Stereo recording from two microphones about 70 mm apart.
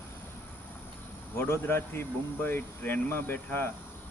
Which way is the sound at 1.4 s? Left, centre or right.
Left.